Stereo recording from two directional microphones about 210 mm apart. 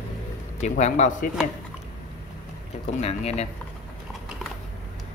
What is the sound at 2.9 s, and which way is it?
Speech, 30° left (ahead or behind).